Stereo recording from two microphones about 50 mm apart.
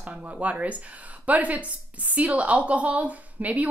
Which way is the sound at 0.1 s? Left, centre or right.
Right.